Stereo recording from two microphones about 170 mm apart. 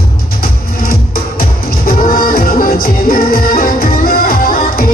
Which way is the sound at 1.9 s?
55° left (ahead or behind).